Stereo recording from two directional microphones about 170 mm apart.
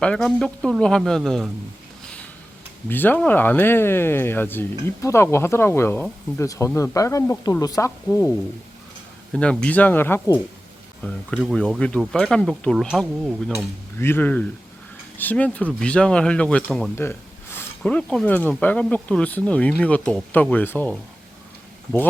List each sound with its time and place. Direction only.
0.0 s speech: 5° left (ahead or behind)
2.9 s speech: 10° left (ahead or behind)
9.3 s speech: 5° left (ahead or behind)
14.0 s speech: 10° left (ahead or behind)